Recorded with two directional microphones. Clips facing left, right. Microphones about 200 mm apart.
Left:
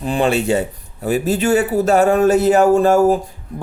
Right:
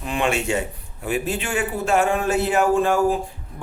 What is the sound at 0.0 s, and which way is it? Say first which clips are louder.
Speech: left 6 dB; 35° left (ahead or behind).